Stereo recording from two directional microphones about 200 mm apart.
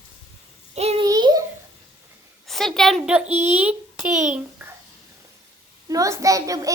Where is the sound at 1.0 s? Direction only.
20° right (ahead or behind).